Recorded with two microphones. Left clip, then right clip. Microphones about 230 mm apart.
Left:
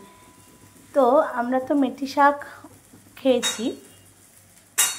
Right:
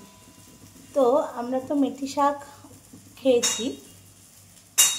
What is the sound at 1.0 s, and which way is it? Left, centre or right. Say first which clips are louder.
Speech: left 3 dB; centre.